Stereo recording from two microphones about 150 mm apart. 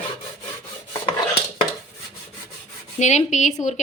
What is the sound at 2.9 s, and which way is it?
Speech, 50° left (ahead or behind).